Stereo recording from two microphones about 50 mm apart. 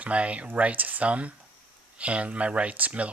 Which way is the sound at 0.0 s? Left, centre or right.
Right.